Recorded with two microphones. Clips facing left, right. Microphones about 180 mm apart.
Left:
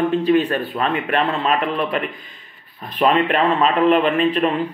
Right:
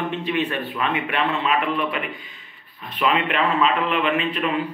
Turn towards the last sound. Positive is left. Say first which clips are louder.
# left 5 dB
turn(degrees=35)  # may be behind; listen again after turning